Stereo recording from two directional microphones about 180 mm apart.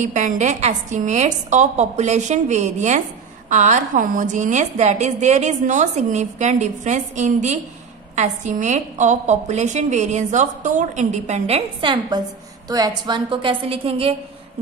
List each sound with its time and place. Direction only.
0.0 s a woman's voice: 45° right (ahead or behind)